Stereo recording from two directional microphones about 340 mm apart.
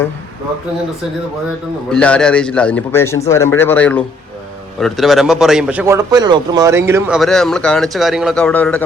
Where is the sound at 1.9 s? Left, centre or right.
Centre.